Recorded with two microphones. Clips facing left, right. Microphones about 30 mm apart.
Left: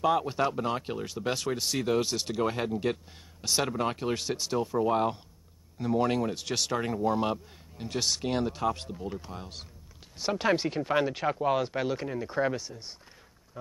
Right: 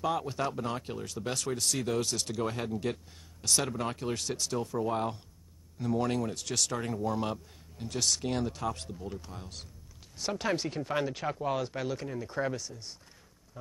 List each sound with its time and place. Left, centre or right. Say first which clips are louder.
0.0 s speech: left 5 dB; centre